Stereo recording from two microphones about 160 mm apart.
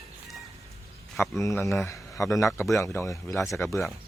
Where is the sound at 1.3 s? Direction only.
20° left (ahead or behind).